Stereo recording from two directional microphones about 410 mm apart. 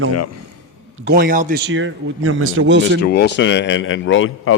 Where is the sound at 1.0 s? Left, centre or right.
Right.